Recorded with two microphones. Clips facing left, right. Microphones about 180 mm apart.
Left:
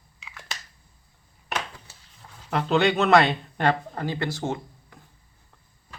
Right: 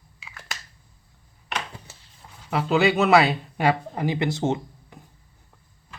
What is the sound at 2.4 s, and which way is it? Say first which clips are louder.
Speech: right 1 dB; 5° right (ahead or behind).